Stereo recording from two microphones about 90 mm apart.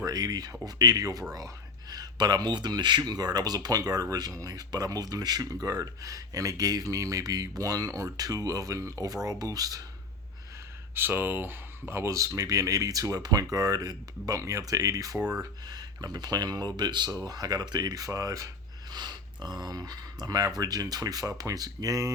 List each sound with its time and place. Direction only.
0.0 s speech: 45° right (ahead or behind)
10.9 s speech: 25° right (ahead or behind); by 17.1 s 55° right (ahead or behind)
17.1 s speech: 40° right (ahead or behind)